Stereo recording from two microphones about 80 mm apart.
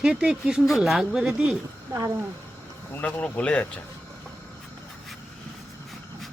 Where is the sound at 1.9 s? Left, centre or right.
Right.